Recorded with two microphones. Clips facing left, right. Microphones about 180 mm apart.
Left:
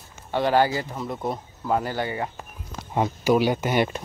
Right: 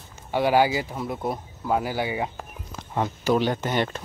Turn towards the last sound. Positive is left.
turn(degrees=15)  # may be behind; listen again after turning